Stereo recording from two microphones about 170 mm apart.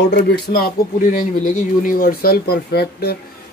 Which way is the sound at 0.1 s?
70° left (ahead or behind).